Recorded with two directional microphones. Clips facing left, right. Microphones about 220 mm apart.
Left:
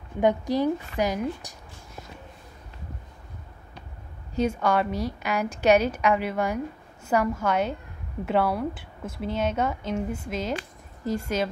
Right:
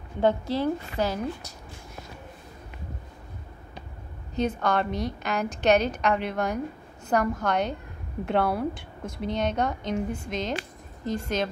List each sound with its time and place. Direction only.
0.2 s a woman's voice: 15° left (ahead or behind)
4.4 s a woman's voice: 10° left (ahead or behind)